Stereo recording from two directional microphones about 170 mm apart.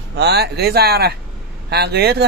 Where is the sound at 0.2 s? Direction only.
70° right (ahead or behind).